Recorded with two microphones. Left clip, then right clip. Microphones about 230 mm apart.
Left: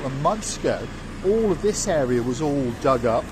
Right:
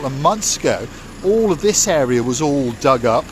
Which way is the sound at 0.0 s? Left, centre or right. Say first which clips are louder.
Right 7 dB; right.